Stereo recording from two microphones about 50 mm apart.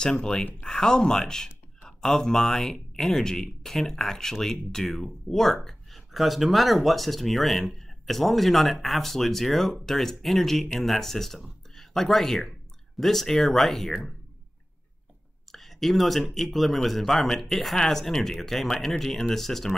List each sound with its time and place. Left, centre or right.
0.0 s speech: centre
15.5 s speech: centre